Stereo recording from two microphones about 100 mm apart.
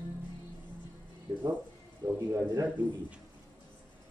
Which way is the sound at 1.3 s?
25° right (ahead or behind).